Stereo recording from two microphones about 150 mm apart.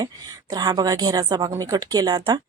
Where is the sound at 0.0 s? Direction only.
25° right (ahead or behind).